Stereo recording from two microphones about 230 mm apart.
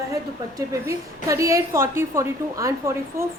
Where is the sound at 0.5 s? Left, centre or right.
Centre.